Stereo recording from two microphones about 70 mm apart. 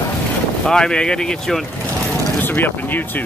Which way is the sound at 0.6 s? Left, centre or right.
Centre.